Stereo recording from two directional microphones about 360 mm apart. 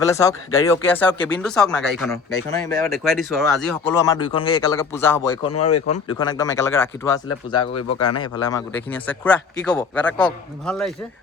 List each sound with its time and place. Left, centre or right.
0.1 s a man's voice: centre
5.5 s speech: left
6.1 s speech: centre
7.7 s speech: left
8.2 s a man's voice: centre